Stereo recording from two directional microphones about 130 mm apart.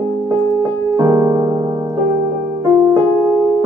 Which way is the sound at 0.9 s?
25° right (ahead or behind).